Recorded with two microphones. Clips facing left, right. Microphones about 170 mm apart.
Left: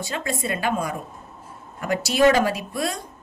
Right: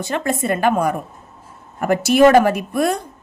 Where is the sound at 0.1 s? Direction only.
50° right (ahead or behind).